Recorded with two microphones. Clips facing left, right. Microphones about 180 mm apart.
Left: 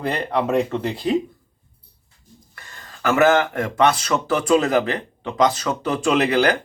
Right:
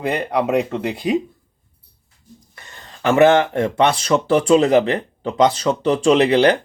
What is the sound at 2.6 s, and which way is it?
Speech, 20° right (ahead or behind).